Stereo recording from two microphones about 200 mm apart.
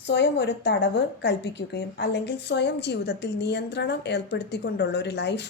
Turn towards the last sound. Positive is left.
turn(degrees=55)  # may be behind; listen again after turning